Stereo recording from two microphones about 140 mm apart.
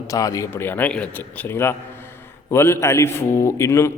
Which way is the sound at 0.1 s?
25° left (ahead or behind).